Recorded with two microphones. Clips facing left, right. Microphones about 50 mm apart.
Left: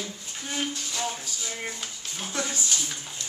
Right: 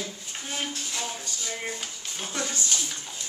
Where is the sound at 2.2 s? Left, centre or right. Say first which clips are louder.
Left 1 dB; centre.